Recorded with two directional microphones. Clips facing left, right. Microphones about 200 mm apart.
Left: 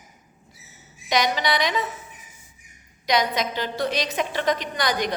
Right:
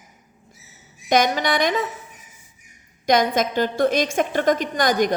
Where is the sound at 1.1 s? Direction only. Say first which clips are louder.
Right 4 dB; 50° right (ahead or behind).